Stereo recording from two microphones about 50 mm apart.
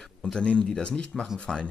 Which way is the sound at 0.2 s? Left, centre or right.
Left.